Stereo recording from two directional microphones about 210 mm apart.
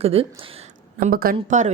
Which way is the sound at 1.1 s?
45° right (ahead or behind).